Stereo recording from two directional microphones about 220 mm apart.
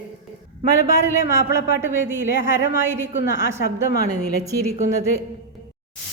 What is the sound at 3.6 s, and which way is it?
Speech, 45° left (ahead or behind).